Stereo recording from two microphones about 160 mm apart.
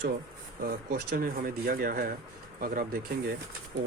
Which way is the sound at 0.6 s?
70° right (ahead or behind).